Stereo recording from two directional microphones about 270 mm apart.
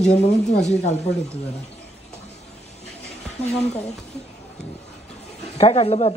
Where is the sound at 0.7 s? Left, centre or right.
Left.